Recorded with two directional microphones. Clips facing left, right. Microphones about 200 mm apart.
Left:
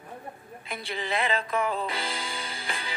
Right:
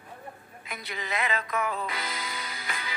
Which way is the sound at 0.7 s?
30° left (ahead or behind).